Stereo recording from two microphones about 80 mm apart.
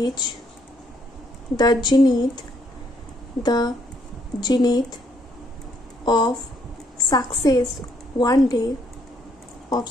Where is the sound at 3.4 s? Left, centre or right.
Left.